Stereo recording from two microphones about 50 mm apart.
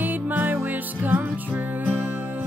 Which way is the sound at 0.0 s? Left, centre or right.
Right.